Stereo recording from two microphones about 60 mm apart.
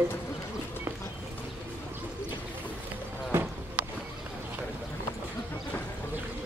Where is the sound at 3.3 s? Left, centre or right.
Right.